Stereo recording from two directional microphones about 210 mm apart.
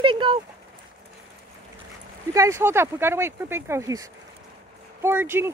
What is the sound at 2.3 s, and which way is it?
Speech, 15° right (ahead or behind).